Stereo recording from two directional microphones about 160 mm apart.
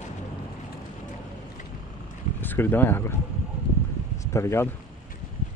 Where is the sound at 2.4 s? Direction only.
10° left (ahead or behind).